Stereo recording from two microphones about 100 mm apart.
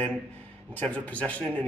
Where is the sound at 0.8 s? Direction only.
15° left (ahead or behind).